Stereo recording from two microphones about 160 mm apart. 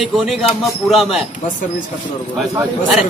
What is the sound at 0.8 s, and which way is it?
Speech, centre (ahead or behind).